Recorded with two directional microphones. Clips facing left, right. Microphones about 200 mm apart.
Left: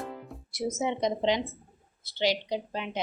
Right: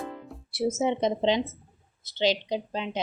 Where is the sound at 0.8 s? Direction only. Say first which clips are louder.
Right 2 dB; 25° right (ahead or behind).